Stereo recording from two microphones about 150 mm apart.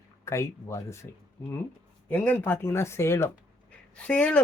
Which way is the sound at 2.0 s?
10° left (ahead or behind).